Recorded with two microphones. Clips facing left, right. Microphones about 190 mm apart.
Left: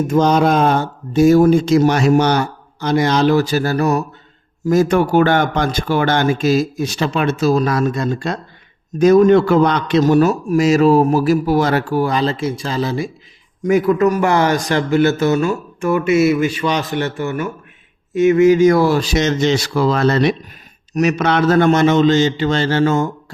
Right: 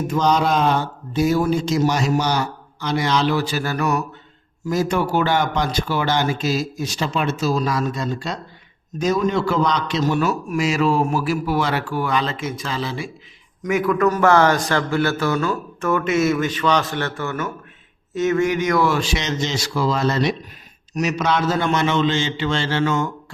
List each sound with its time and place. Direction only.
0.1 s speech: 50° left (ahead or behind); by 4.0 s 35° left (ahead or behind)
4.6 s a man's voice: 50° left (ahead or behind)
13.7 s a man's voice: 30° left (ahead or behind)
14.1 s speech: 15° left (ahead or behind)
18.4 s a man's voice: 30° left (ahead or behind)
19.4 s speech: 60° left (ahead or behind); by 23.0 s 35° left (ahead or behind)